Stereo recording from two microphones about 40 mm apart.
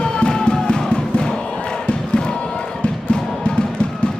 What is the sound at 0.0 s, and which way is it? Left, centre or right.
Music, left.